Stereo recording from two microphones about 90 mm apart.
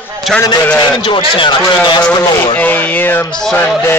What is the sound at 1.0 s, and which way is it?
Speech, 70° left (ahead or behind).